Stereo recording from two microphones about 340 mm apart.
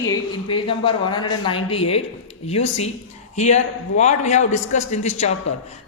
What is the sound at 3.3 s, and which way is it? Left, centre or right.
A man's voice, centre.